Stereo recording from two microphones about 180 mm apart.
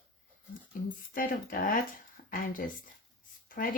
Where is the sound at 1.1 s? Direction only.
50° left (ahead or behind).